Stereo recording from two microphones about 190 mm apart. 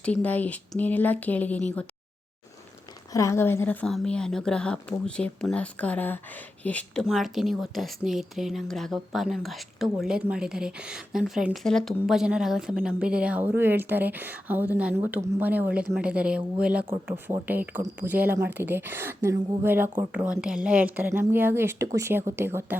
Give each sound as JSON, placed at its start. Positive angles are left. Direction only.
{"t": 0.0, "sound": "a woman's voice", "side_deg": 5}
{"t": 3.1, "sound": "a woman's voice", "side_deg": 15}